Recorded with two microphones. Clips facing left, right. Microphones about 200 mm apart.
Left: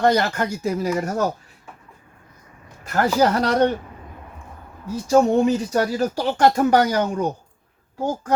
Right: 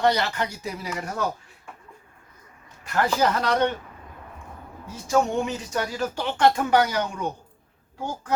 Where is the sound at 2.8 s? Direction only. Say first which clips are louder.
Left 4 dB; 40° left (ahead or behind).